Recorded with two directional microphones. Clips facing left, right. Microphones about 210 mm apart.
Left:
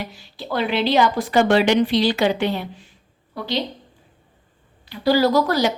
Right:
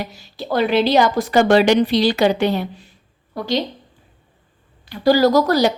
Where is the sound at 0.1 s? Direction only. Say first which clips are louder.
Right 4 dB; 40° right (ahead or behind).